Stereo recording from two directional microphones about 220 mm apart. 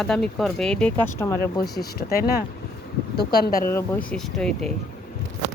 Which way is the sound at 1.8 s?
45° left (ahead or behind).